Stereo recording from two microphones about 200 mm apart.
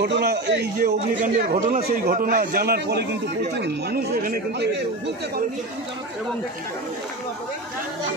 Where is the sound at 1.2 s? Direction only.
40° right (ahead or behind); by 5.4 s 55° right (ahead or behind).